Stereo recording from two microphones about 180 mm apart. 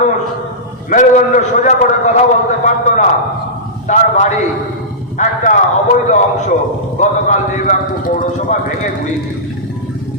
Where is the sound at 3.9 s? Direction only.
40° left (ahead or behind).